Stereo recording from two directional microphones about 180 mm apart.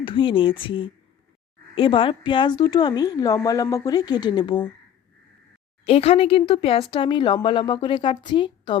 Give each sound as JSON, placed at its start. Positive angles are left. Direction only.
{"t": 0.0, "sound": "speech", "side_deg": 30}
{"t": 5.8, "sound": "speech", "side_deg": 35}